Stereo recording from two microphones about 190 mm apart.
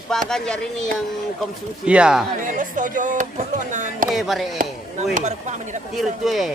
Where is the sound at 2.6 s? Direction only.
40° right (ahead or behind).